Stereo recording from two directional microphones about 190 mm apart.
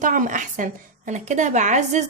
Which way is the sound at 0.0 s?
40° right (ahead or behind).